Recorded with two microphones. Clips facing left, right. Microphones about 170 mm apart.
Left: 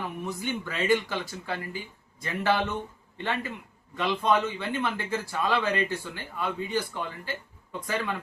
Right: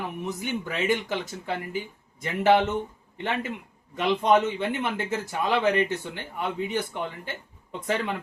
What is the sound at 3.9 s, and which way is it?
Speech, 20° right (ahead or behind).